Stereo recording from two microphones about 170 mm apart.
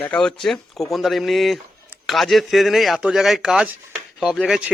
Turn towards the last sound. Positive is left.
turn(degrees=0)  # may be behind; listen again after turning